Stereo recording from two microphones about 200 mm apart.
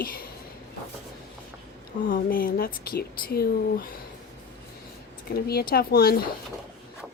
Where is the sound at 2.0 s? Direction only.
45° left (ahead or behind).